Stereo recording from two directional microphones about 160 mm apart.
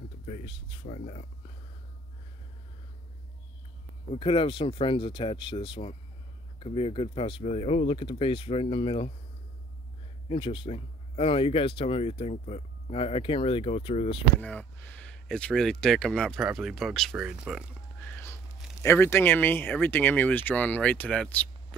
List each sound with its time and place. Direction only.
0.3 s a sound: 30° left (ahead or behind)
0.8 s speech: 45° left (ahead or behind)
4.1 s speech: 35° left (ahead or behind)
10.2 s speech: 35° left (ahead or behind)
14.4 s speech: 10° left (ahead or behind)
18.0 s a sound: 15° left (ahead or behind)
18.8 s speech: 15° left (ahead or behind)